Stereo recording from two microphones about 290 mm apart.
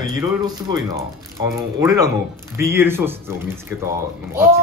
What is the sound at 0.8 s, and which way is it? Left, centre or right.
Speech, centre.